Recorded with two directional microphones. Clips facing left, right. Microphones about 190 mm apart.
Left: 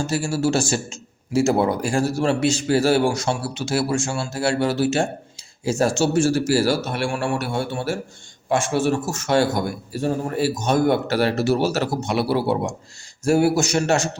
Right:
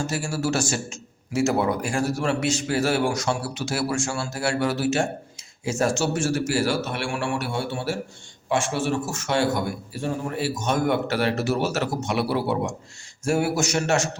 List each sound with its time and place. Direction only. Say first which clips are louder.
0.1 s a man's voice: left 5 dB; 30° left (ahead or behind)